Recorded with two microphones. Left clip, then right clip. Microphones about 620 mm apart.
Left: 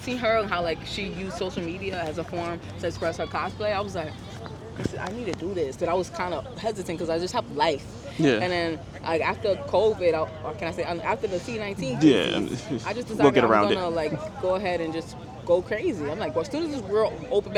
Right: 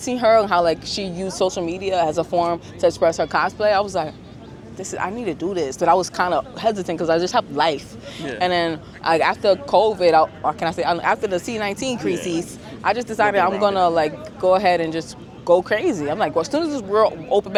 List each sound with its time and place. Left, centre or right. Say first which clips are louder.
0.0 s a woman's voice: right 8 dB; right